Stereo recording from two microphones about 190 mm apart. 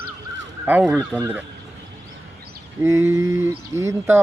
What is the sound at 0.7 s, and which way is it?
Speech, 5° right (ahead or behind).